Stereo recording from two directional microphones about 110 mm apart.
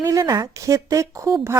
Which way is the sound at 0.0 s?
30° right (ahead or behind).